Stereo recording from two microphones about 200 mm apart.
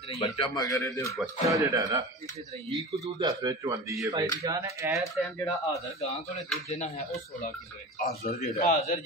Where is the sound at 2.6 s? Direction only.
30° right (ahead or behind).